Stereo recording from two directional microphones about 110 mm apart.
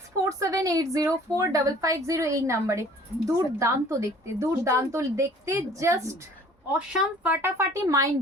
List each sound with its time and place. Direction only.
0.3 s speech: 30° right (ahead or behind)
6.7 s speech: 10° right (ahead or behind); by 8.1 s 30° right (ahead or behind)